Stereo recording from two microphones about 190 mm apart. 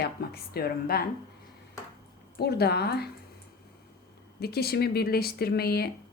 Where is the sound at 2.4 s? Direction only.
55° left (ahead or behind).